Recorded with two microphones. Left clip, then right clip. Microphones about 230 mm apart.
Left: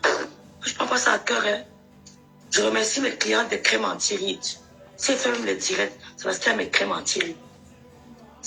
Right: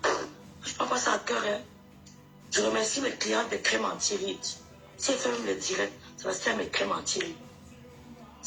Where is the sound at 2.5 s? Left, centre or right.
Left.